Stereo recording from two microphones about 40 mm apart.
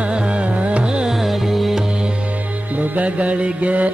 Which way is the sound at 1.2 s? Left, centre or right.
Centre.